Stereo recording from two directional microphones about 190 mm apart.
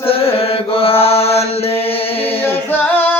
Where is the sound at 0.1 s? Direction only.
30° left (ahead or behind).